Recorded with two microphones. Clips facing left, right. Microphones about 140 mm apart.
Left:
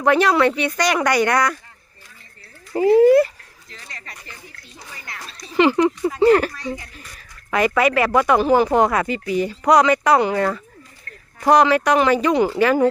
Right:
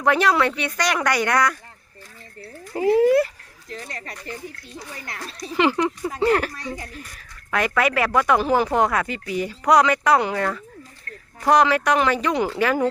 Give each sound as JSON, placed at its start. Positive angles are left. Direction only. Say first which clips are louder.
{"t": 0.0, "sound": "speech", "louder": "left 3 dB", "side_deg": 0}
{"t": 2.7, "sound": "speech", "louder": "left 4 dB", "side_deg": 0}
{"t": 3.7, "sound": "speech", "louder": "right 7 dB", "side_deg": -45}
{"t": 5.5, "sound": "speech", "louder": "left 5 dB", "side_deg": 0}
{"t": 7.8, "sound": "speech", "louder": "left 2 dB", "side_deg": 0}